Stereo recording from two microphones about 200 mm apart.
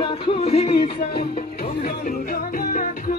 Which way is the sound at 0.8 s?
50° left (ahead or behind).